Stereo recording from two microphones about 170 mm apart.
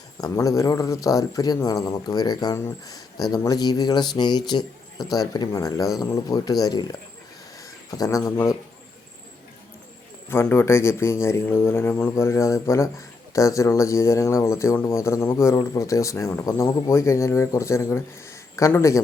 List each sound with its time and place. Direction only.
0.2 s speech: 20° left (ahead or behind)
10.2 s a man's voice: 15° left (ahead or behind)